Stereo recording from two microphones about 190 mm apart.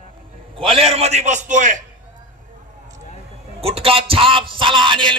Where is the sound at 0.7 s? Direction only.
30° right (ahead or behind).